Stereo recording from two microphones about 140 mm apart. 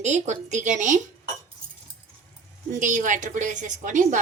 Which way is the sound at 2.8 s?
65° right (ahead or behind).